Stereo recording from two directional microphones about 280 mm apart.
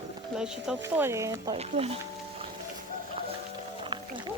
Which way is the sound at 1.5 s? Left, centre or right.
Right.